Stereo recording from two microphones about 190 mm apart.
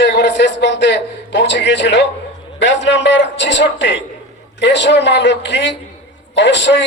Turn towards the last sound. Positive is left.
turn(degrees=70)  # may be behind; listen again after turning